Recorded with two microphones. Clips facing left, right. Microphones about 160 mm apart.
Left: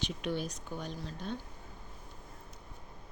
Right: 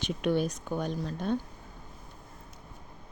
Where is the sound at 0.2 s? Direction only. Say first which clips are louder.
Right 8 dB; 55° right (ahead or behind).